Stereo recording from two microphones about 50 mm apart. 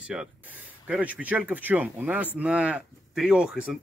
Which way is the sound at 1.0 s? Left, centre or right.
Right.